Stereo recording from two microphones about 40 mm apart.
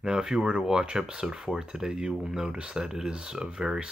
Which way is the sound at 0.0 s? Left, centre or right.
Centre.